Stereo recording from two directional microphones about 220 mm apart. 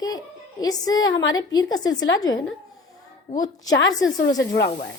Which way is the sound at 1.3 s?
15° left (ahead or behind).